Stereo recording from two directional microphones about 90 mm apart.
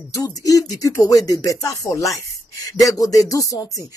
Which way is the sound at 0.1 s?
40° left (ahead or behind).